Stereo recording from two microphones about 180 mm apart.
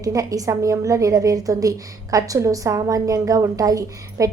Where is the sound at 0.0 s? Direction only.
20° right (ahead or behind).